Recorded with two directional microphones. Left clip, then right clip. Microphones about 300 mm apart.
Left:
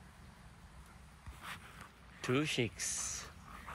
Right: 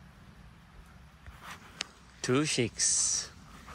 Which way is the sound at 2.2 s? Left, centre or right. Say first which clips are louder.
Right 6 dB; centre.